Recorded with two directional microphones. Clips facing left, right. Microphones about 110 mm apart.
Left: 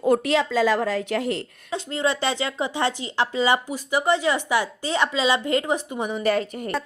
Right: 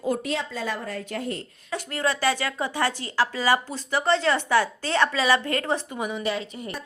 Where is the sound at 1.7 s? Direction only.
20° left (ahead or behind).